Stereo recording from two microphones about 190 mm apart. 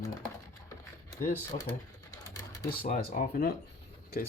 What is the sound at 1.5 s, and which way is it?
Speech, 35° left (ahead or behind).